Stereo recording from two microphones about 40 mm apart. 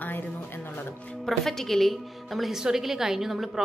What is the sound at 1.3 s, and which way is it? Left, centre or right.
A woman's voice, centre.